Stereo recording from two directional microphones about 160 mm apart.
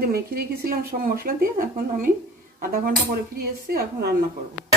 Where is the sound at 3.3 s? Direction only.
70° right (ahead or behind).